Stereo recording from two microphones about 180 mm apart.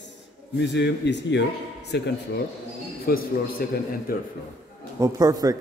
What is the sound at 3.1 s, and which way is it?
A man's voice, 55° left (ahead or behind).